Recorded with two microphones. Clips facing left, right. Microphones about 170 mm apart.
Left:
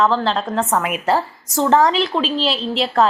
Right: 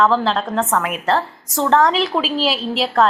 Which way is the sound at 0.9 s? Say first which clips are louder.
Left 1 dB; 5° left (ahead or behind).